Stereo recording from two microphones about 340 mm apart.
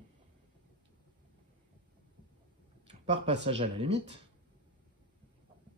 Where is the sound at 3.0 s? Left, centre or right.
Centre.